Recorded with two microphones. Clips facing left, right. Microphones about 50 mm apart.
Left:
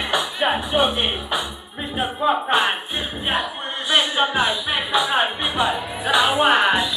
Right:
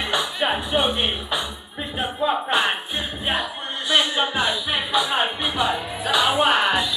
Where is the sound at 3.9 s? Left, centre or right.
Left.